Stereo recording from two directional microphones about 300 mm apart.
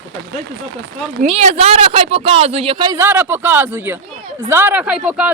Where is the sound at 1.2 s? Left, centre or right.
Right; by 5.3 s centre.